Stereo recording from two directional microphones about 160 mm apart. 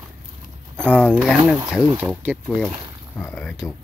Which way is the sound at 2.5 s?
5° left (ahead or behind).